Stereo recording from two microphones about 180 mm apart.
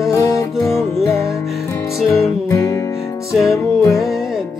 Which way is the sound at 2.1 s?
15° left (ahead or behind).